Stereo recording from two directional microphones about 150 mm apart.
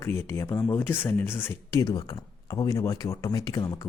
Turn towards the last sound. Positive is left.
turn(degrees=20)  # may be behind; listen again after turning